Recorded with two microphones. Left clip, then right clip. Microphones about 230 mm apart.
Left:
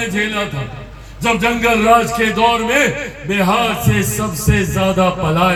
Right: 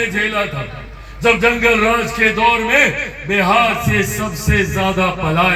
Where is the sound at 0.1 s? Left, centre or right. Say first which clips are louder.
Right 1 dB; left.